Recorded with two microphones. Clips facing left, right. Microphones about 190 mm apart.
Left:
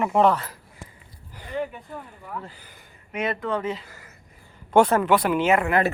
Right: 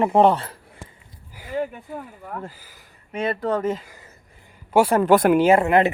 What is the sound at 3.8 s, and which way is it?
Speech, 15° right (ahead or behind).